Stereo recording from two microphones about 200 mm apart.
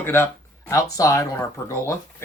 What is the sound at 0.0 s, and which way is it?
Speech, 10° left (ahead or behind).